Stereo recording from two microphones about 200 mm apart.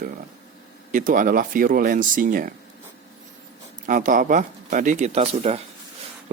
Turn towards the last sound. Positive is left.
turn(degrees=-30)  # may be behind; listen again after turning